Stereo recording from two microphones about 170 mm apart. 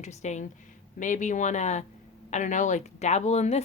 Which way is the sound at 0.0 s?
45° left (ahead or behind).